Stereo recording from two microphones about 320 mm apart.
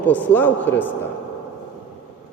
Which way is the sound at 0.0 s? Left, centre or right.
Centre.